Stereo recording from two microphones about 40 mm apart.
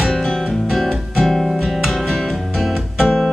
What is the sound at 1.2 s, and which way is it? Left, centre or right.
Guitar, centre.